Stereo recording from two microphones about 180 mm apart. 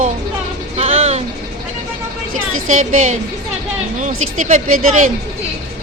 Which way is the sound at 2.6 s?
45° right (ahead or behind).